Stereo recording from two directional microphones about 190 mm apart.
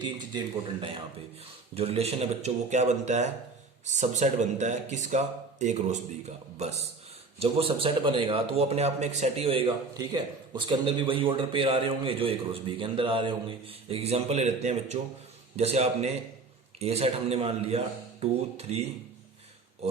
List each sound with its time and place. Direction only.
0.0 s a man's voice: 25° right (ahead or behind)